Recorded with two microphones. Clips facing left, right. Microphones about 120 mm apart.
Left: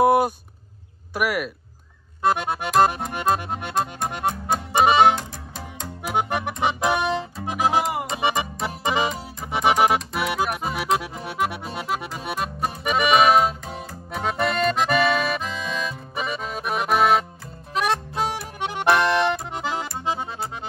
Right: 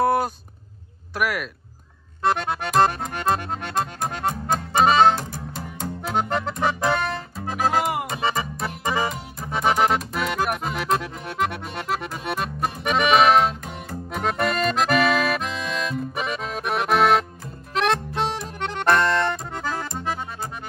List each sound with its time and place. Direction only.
0.0 s a sound: 10° left (ahead or behind)
1.1 s speech: 5° left (ahead or behind)
2.2 s accordion: 10° left (ahead or behind)
4.8 s music: 10° left (ahead or behind)
5.1 s music: 5° right (ahead or behind)
6.0 s music: 10° left (ahead or behind)
7.8 s music: centre (ahead or behind)
8.1 s music: 15° left (ahead or behind)
9.5 s accordion: 10° left (ahead or behind)